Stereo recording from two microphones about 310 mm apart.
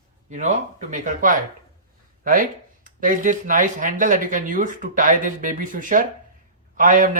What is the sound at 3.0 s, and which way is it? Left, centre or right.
Speech, right.